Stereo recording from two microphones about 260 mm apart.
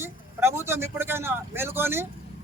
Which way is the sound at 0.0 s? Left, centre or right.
Centre.